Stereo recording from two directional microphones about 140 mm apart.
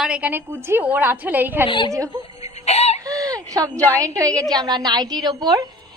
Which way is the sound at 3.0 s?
25° right (ahead or behind).